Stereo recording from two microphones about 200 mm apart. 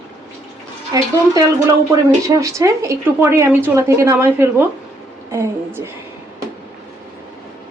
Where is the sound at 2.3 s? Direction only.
15° right (ahead or behind).